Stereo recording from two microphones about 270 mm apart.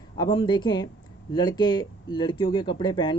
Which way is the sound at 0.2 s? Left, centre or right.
Centre.